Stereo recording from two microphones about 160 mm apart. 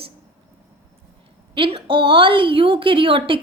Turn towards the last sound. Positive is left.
turn(degrees=-35)  # may be behind; listen again after turning